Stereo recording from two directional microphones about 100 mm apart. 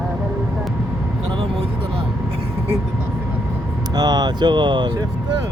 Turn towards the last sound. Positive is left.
turn(degrees=-50)  # may be behind; listen again after turning